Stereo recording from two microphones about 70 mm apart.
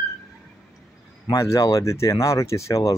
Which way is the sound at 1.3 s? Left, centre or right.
Left.